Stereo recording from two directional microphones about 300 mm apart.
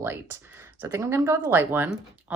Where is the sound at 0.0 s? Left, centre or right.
Centre.